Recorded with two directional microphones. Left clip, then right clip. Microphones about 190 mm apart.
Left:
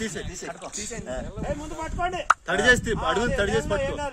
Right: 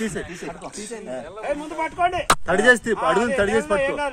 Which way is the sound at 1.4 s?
10° right (ahead or behind).